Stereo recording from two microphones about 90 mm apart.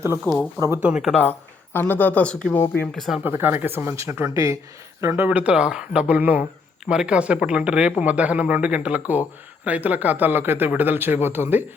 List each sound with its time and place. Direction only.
0.3 s speech: 20° left (ahead or behind)
0.8 s speech: 15° right (ahead or behind)
1.1 s speech: 20° left (ahead or behind)
3.2 s speech: 25° right (ahead or behind)